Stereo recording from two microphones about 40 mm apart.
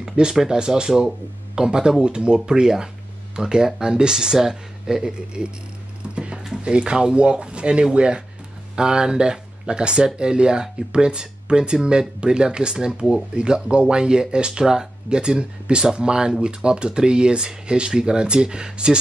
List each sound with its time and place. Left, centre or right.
0.0 s speech: centre
6.0 s music: right
6.5 s speech: right